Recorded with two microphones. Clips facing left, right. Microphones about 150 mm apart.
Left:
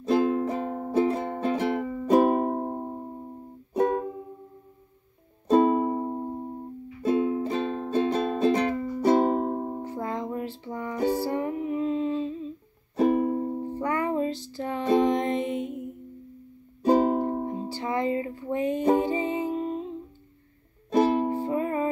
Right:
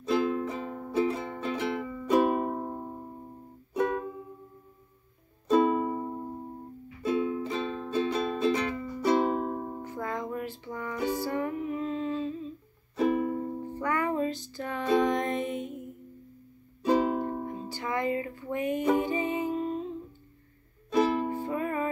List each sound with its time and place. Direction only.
0.0 s music: 40° left (ahead or behind)
5.5 s music: 40° left (ahead or behind); by 12.4 s 25° left (ahead or behind)
12.9 s music: 40° left (ahead or behind)
16.8 s music: 40° left (ahead or behind); by 19.9 s 25° left (ahead or behind)
20.9 s music: 40° left (ahead or behind)